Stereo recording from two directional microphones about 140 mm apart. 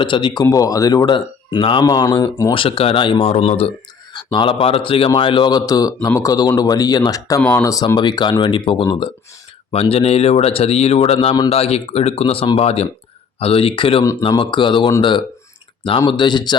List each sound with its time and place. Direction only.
0.0 s a man's voice: 35° left (ahead or behind); by 3.7 s 50° left (ahead or behind)
4.1 s a man's voice: 35° left (ahead or behind)
9.8 s a man's voice: 45° left (ahead or behind)